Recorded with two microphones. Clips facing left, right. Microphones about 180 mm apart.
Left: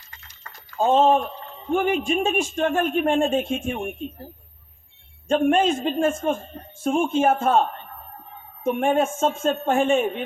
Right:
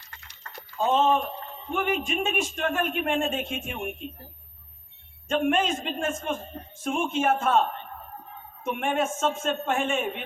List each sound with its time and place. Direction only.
0.0 s a sound: 70° right (ahead or behind)
0.8 s a man's voice: 30° left (ahead or behind)
5.3 s a man's voice: 35° left (ahead or behind)
8.6 s a man's voice: 35° left (ahead or behind)